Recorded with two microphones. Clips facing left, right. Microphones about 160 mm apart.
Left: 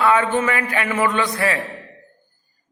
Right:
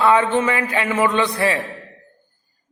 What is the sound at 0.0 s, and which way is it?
A man's voice, 25° right (ahead or behind).